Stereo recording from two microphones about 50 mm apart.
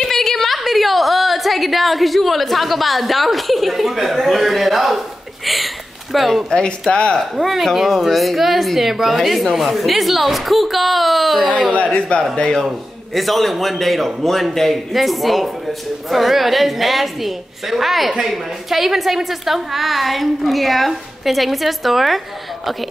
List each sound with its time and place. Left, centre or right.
0.0 s a woman's voice: centre
6.9 s speech: left
7.2 s a woman's voice: centre
11.7 s speech: left
12.6 s a woman's voice: centre